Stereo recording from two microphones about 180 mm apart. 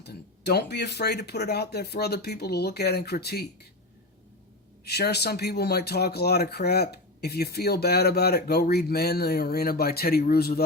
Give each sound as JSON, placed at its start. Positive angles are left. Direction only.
{"t": 0.0, "sound": "speech", "side_deg": 65}
{"t": 4.9, "sound": "speech", "side_deg": 65}